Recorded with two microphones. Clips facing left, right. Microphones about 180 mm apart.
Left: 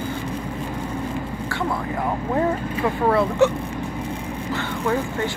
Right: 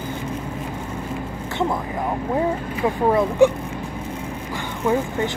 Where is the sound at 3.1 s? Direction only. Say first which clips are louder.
Right 2 dB; 15° right (ahead or behind).